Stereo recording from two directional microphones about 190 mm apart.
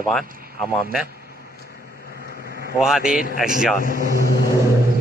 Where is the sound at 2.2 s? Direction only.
50° left (ahead or behind).